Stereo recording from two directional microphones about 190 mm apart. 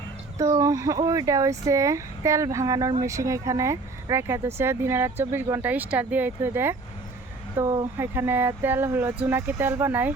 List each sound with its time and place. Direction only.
0.3 s speech: 15° right (ahead or behind)